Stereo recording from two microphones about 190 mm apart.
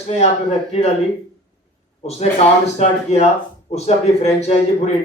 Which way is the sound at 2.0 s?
35° left (ahead or behind).